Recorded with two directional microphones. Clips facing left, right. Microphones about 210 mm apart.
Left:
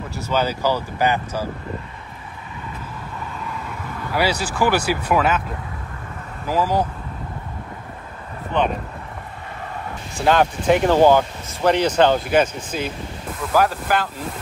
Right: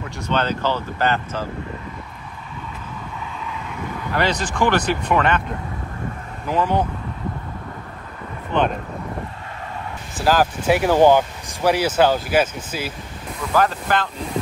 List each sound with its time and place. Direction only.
0.0 s speech: 5° left (ahead or behind)
4.1 s speech: 10° left (ahead or behind)
6.4 s speech: 5° left (ahead or behind)
10.1 s speech: centre (ahead or behind)
13.5 s speech: 10° left (ahead or behind)